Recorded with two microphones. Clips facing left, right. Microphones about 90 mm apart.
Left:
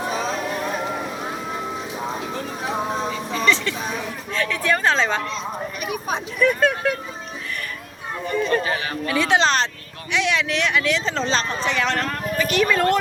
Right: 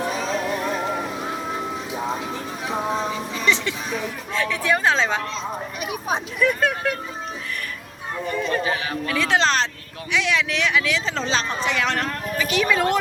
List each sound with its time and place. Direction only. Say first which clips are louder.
3.1 s a sound: left 2 dB; 15° right (ahead or behind)
5.8 s speech: right 1 dB; 20° right (ahead or behind)
6.4 s speech: left 3 dB; 5° right (ahead or behind)
8.3 s speech: left 2 dB; centre (ahead or behind)